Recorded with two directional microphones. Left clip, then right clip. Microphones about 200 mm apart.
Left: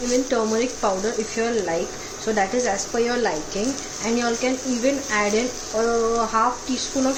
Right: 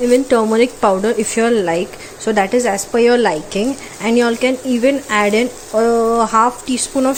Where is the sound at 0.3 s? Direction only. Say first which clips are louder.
Right 9 dB; 45° right (ahead or behind).